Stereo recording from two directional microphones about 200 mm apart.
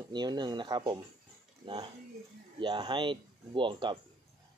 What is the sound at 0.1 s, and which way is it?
Speech, 20° right (ahead or behind).